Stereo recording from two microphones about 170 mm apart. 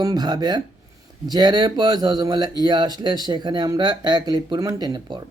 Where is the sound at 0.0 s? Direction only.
25° right (ahead or behind).